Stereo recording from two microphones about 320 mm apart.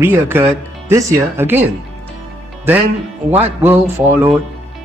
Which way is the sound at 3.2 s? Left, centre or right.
Centre.